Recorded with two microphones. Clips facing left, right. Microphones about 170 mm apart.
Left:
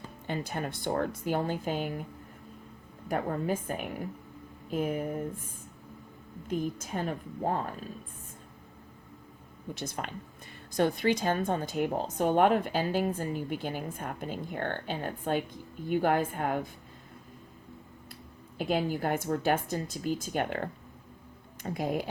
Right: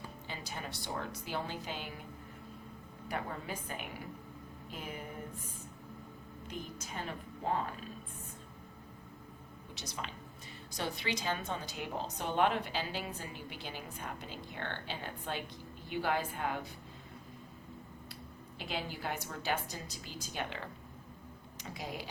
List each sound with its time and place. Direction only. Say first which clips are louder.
0.3 s a woman's voice: left 11 dB; 55° left (ahead or behind)
3.1 s a woman's voice: left 10 dB; 50° left (ahead or behind)
6.5 s a woman's voice: left 12 dB; 50° left (ahead or behind)
9.7 s a woman's voice: left 7 dB; 50° left (ahead or behind)
18.5 s a woman's voice: left 11 dB; 50° left (ahead or behind)